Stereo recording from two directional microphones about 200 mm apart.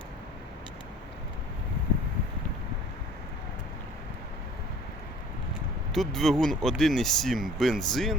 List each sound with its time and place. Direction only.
5.9 s speech: centre (ahead or behind)